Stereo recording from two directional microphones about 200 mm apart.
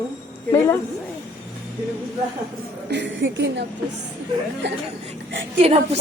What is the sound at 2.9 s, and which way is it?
Speech, 65° right (ahead or behind).